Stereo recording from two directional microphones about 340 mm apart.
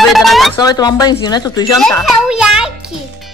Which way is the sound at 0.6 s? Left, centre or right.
Centre.